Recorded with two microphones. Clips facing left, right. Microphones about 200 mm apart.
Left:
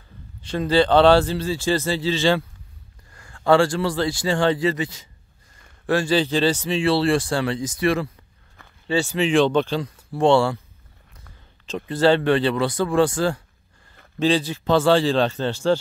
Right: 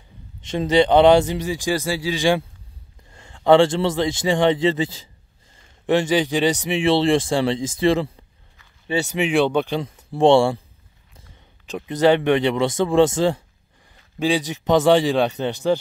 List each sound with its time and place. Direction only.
0.5 s speech: 20° right (ahead or behind)
11.6 s speech: 15° right (ahead or behind)